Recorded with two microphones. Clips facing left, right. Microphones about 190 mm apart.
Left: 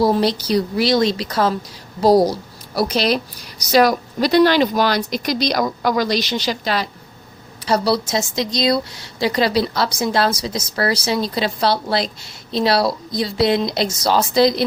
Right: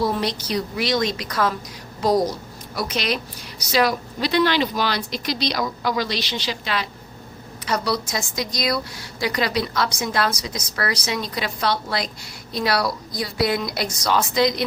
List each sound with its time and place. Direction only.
0.0 s a woman's voice: 35° left (ahead or behind)